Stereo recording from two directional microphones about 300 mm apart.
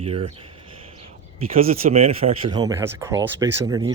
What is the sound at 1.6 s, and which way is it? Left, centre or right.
Speech, centre.